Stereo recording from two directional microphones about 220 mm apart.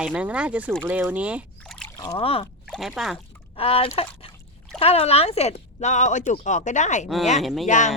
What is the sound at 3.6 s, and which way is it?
Speech, 25° left (ahead or behind).